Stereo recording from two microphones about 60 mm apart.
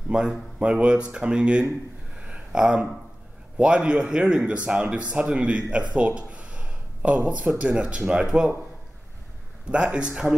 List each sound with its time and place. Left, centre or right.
0.1 s speech: centre
2.2 s a sound: centre
3.5 s speech: centre
5.9 s a sound: centre
7.7 s speech: centre
9.7 s speech: centre